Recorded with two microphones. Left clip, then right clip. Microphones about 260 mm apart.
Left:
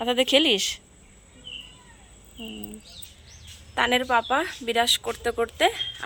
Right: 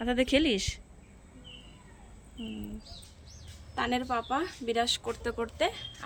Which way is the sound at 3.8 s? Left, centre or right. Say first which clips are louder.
Left 9 dB; centre.